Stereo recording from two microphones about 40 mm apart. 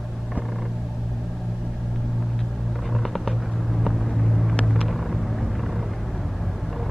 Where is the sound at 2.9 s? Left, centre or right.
Centre.